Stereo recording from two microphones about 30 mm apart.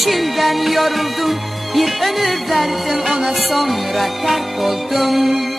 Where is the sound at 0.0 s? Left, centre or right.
Centre.